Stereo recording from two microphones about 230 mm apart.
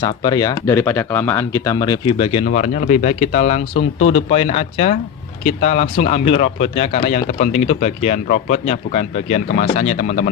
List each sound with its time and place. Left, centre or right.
0.0 s speech: centre